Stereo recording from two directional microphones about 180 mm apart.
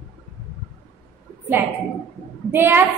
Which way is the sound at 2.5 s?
10° right (ahead or behind).